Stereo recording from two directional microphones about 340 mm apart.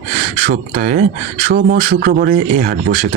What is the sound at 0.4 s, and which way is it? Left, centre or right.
A man's voice, right.